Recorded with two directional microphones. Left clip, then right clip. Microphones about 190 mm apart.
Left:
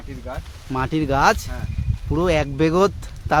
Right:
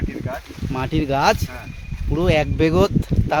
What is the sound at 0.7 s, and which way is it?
Speech, 5° left (ahead or behind).